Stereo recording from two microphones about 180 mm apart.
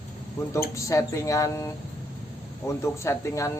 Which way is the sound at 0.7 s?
15° left (ahead or behind).